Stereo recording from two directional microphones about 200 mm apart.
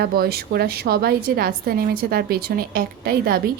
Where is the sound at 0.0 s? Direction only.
50° right (ahead or behind).